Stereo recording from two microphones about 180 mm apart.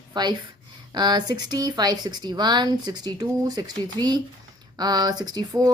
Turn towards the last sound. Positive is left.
turn(degrees=-20)  # may be behind; listen again after turning